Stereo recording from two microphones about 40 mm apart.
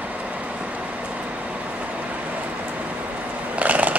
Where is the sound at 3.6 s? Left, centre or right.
Right.